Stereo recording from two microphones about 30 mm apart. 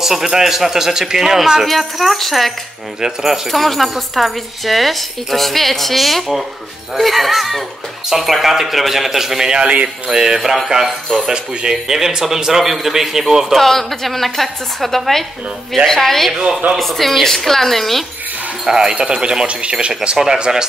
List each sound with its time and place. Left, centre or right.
0.0 s speech: centre
1.7 s a woman's voice: centre
3.0 s speech: centre
3.5 s a woman's voice: centre
9.7 s speech: right
10.1 s a woman's voice: centre
13.6 s a woman's voice: centre
18.7 s speech: right
18.9 s speech: right
20.3 s speech: right